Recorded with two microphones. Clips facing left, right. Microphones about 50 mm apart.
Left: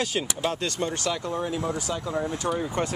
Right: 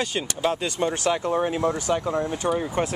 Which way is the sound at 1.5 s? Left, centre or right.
Right.